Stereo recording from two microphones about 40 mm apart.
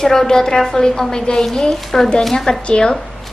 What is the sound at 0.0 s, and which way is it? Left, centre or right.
A woman's voice, centre.